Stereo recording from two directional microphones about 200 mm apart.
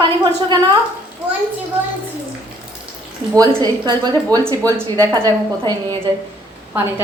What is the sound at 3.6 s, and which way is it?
Speech, 20° right (ahead or behind).